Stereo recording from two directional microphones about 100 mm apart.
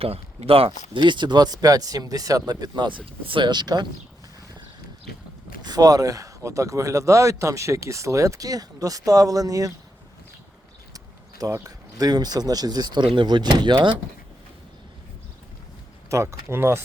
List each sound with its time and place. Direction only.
0.0 s speech: 80° right
0.9 s speech: 50° right (ahead or behind)
5.6 s speech: 40° right (ahead or behind)
10.9 s speech: 35° right (ahead or behind)
16.0 s speech: 25° right (ahead or behind)